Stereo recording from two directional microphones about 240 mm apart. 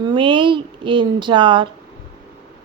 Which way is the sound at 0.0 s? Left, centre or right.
Centre.